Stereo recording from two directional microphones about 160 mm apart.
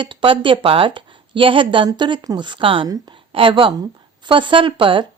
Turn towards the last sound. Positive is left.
turn(degrees=-30)  # may be behind; listen again after turning